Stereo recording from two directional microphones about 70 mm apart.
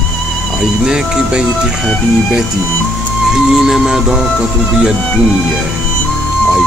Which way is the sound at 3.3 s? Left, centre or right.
Centre.